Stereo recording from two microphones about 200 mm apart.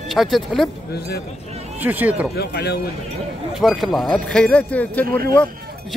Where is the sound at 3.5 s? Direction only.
Centre (ahead or behind).